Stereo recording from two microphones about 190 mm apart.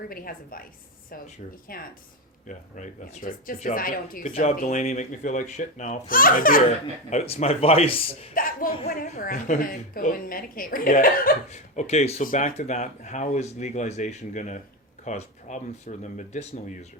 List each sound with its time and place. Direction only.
0.1 s speech: 50° left (ahead or behind)
1.7 s a woman's voice: 50° left (ahead or behind)
7.1 s a woman's voice: 35° left (ahead or behind)
8.4 s a woman's voice: 45° left (ahead or behind)